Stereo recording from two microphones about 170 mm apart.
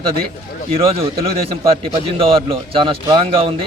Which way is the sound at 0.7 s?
35° right (ahead or behind).